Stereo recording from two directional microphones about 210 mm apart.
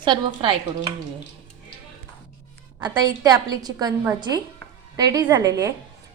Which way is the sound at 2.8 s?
20° right (ahead or behind).